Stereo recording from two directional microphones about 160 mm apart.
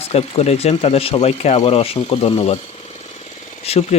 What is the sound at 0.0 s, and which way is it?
Speech, 40° left (ahead or behind).